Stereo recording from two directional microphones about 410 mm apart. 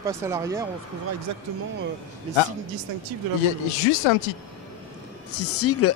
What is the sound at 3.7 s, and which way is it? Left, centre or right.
Speech, left.